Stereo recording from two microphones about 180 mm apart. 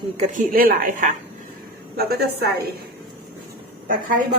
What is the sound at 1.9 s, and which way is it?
Speech, 60° right (ahead or behind).